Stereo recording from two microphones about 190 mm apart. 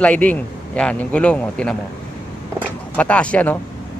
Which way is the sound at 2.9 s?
5° left (ahead or behind).